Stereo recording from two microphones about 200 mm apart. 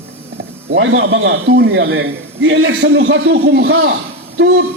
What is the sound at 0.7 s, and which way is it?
A man's voice, 70° right (ahead or behind).